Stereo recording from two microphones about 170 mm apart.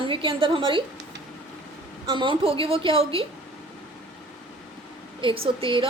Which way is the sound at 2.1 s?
30° right (ahead or behind).